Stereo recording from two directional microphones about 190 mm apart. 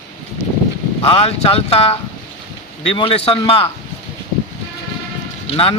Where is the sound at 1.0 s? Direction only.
30° left (ahead or behind).